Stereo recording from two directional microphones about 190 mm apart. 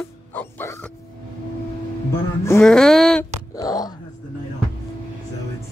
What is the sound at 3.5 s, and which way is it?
Wail, 20° left (ahead or behind).